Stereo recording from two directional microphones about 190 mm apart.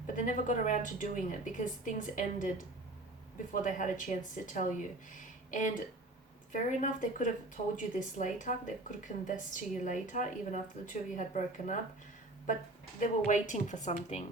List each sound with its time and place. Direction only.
0.1 s a woman's voice: 45° left (ahead or behind)
3.5 s a woman's voice: 45° left (ahead or behind)
13.0 s speech: 40° left (ahead or behind)